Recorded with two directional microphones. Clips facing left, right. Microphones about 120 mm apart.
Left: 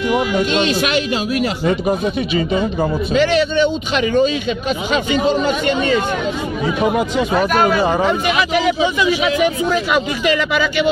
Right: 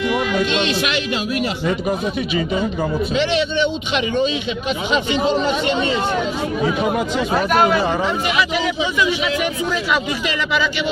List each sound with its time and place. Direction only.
0.1 s speech: 45° left (ahead or behind)
3.2 s speech: 40° left (ahead or behind)
7.4 s speech: 25° right (ahead or behind)
8.1 s speech: 5° left (ahead or behind)
9.9 s speech: 55° left (ahead or behind)